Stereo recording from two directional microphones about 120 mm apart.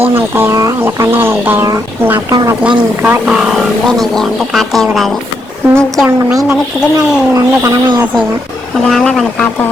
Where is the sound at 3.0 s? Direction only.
10° right (ahead or behind).